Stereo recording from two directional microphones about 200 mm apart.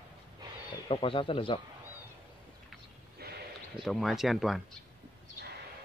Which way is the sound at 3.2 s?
50° right (ahead or behind).